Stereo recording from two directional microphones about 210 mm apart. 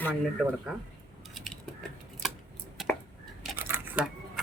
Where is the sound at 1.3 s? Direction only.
Centre (ahead or behind).